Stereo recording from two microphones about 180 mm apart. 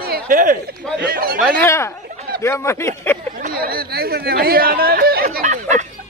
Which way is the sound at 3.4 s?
55° right (ahead or behind).